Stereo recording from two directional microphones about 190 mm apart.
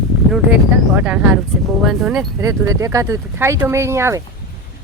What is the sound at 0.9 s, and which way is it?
Speech, 5° right (ahead or behind).